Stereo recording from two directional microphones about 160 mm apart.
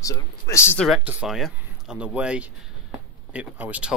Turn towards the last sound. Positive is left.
turn(degrees=-10)  # may be behind; listen again after turning